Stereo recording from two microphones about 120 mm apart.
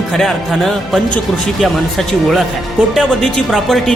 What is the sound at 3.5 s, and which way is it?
Speech, centre (ahead or behind).